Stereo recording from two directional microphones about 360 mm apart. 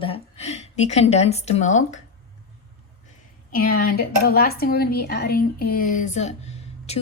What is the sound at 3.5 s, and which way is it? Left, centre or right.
A woman's voice, left.